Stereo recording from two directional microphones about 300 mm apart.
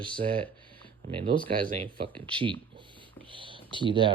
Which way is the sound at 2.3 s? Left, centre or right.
Centre.